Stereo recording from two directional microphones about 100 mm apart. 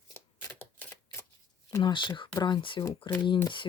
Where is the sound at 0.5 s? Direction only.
15° left (ahead or behind).